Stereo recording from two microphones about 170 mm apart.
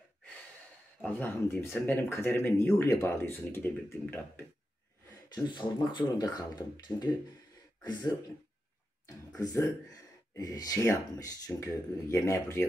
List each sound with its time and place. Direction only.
1.0 s speech: 10° left (ahead or behind)
5.3 s speech: 25° left (ahead or behind)
9.0 s speech: 20° left (ahead or behind)